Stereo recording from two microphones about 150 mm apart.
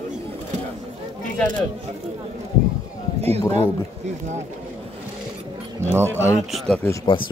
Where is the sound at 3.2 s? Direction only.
45° right (ahead or behind).